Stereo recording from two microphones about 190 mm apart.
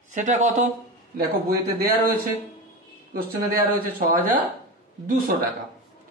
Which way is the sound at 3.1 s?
50° right (ahead or behind).